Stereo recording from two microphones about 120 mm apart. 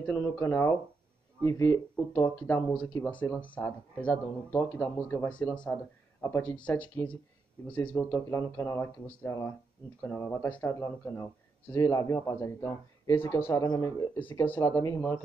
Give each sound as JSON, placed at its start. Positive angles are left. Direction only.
{"t": 0.0, "sound": "speech", "side_deg": 20}